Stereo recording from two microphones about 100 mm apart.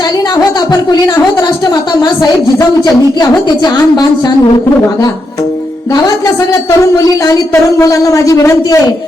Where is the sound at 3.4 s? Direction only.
40° left (ahead or behind).